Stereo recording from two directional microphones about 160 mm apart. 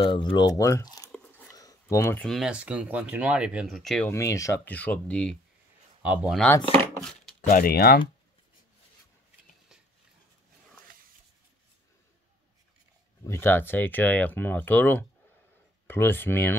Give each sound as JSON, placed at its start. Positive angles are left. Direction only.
{"t": 0.0, "sound": "speech", "side_deg": 30}
{"t": 1.1, "sound": "biting", "side_deg": 10}
{"t": 1.5, "sound": "a sound", "side_deg": 20}
{"t": 2.1, "sound": "speech", "side_deg": 0}
{"t": 4.1, "sound": "speech", "side_deg": 20}
{"t": 4.7, "sound": "speech", "side_deg": 10}
{"t": 6.0, "sound": "speech", "side_deg": -10}
{"t": 7.4, "sound": "speech", "side_deg": 65}
{"t": 13.2, "sound": "speech", "side_deg": 15}